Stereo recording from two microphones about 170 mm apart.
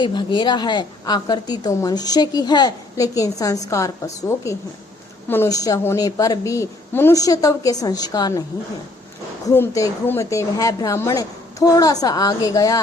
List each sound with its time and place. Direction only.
0.0 s a woman's voice: 25° left (ahead or behind)
9.5 s a woman's voice: 20° left (ahead or behind)